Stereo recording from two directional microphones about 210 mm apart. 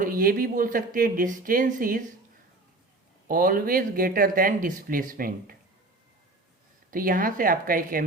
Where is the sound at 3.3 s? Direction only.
40° right (ahead or behind).